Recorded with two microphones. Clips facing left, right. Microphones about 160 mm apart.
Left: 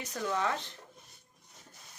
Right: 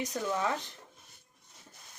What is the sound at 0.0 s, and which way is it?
Speech, 15° right (ahead or behind).